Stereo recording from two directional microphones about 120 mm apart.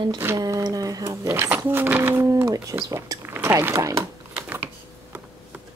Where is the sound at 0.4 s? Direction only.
30° right (ahead or behind).